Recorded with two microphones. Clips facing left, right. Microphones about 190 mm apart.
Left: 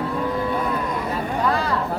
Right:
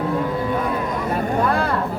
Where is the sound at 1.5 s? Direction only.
55° right (ahead or behind).